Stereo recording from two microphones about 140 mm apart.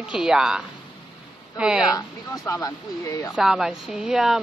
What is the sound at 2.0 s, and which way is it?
Speech, 25° left (ahead or behind).